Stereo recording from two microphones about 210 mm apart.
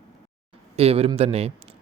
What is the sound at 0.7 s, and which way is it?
Speech, 30° right (ahead or behind).